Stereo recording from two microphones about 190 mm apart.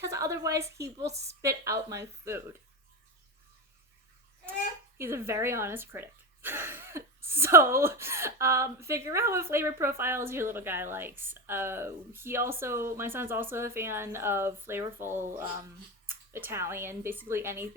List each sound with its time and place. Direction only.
0.0 s speech: 15° right (ahead or behind)
1.1 s a woman's voice: 35° right (ahead or behind)
1.4 s speech: 15° right (ahead or behind)
4.9 s speech: 15° right (ahead or behind)